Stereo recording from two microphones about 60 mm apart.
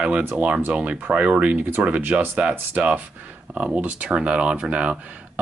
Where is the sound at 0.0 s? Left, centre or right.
Right.